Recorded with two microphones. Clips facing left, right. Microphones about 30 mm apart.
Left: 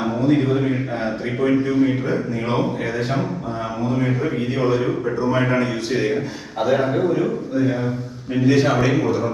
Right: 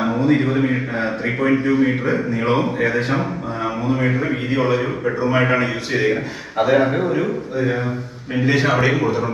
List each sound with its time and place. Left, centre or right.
0.0 s speech: right
1.4 s a man's voice: right
2.5 s a man's voice: centre
2.8 s a man's voice: right
5.0 s a man's voice: right
5.9 s a man's voice: right